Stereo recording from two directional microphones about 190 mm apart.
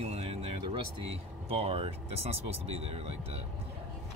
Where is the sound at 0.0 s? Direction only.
35° right (ahead or behind).